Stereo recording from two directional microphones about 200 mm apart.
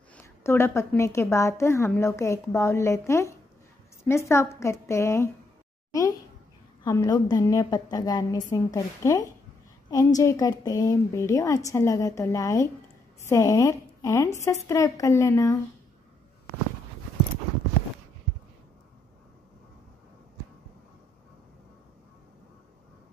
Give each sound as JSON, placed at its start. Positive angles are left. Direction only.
{"t": 0.1, "sound": "a woman's voice", "side_deg": 10}
{"t": 6.8, "sound": "a woman's voice", "side_deg": 15}